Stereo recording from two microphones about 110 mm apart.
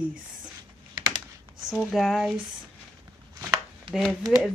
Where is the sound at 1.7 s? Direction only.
Centre (ahead or behind).